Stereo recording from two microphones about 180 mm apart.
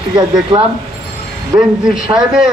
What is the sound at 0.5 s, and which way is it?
Speech, 30° right (ahead or behind).